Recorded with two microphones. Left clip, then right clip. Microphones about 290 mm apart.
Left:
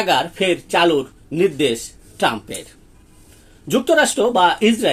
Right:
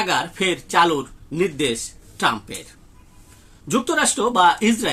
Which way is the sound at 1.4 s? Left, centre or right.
Right.